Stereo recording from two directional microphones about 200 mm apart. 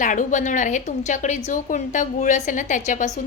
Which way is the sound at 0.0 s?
40° left (ahead or behind).